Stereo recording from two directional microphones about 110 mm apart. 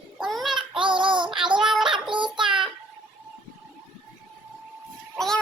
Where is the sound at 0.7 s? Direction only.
50° right (ahead or behind).